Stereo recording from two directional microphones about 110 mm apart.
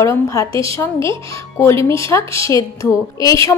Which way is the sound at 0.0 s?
30° left (ahead or behind).